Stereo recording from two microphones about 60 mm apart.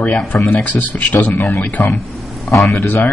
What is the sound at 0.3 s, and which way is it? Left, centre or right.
A man's voice, left.